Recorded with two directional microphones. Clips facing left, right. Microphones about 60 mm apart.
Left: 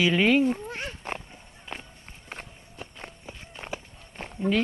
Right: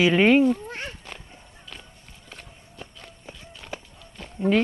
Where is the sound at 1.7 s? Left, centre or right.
Left.